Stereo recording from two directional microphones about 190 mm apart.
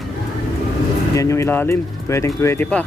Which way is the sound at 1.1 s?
15° left (ahead or behind).